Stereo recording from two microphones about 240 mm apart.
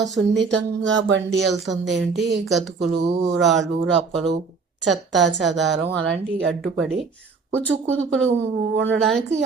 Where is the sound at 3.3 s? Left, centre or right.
Centre.